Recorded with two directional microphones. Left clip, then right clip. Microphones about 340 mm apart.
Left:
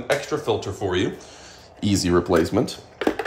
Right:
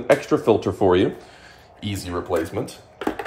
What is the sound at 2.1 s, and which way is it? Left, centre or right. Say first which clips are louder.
Speech: left 4 dB; left.